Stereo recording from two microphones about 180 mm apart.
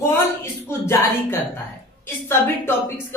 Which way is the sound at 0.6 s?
15° left (ahead or behind).